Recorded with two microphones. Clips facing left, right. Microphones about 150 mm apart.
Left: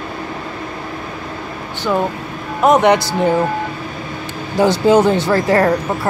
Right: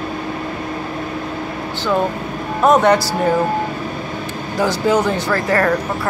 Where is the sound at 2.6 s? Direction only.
15° left (ahead or behind).